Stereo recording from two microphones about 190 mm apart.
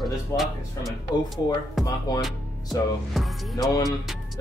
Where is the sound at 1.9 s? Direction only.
20° left (ahead or behind).